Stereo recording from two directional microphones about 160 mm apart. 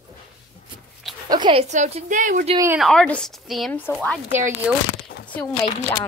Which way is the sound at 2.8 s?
5° left (ahead or behind).